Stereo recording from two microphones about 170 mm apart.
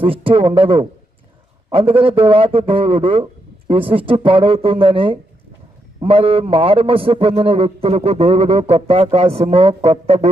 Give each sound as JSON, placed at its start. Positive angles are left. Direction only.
{"t": 0.0, "sound": "a man's voice", "side_deg": -30}